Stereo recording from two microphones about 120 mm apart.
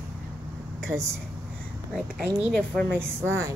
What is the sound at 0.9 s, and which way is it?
Speech, 20° right (ahead or behind).